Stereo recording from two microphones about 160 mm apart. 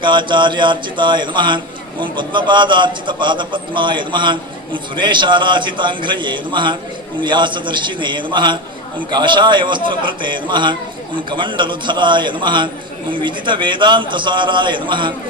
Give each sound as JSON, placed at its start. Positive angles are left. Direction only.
{"t": 0.0, "sound": "a man's voice", "side_deg": -30}